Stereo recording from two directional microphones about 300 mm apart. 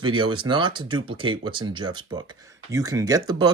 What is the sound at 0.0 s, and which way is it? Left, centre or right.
Speech, centre.